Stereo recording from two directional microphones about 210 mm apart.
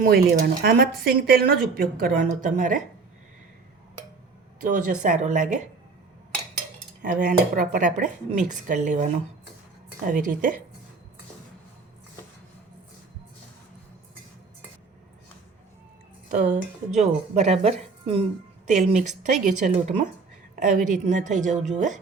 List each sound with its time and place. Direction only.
0.0 s speech: 45° right (ahead or behind)
4.7 s speech: 40° right (ahead or behind)
7.0 s speech: 40° right (ahead or behind)
10.1 s speech: 40° right (ahead or behind)
16.3 s speech: 35° right (ahead or behind)